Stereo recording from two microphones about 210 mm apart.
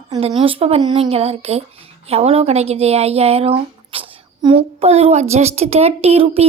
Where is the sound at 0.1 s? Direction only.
30° right (ahead or behind).